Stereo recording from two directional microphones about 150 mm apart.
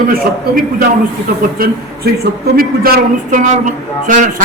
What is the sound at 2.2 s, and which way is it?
A man's voice, 85° right.